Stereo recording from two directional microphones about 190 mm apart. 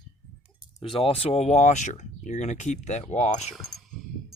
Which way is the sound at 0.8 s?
30° left (ahead or behind).